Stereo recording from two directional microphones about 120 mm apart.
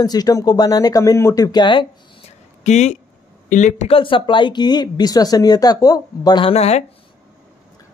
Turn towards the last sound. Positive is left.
turn(degrees=60)  # may be behind; listen again after turning